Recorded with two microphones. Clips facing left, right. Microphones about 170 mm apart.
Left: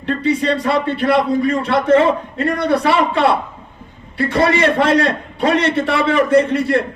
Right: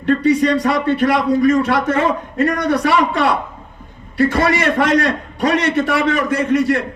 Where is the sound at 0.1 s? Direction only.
45° right (ahead or behind).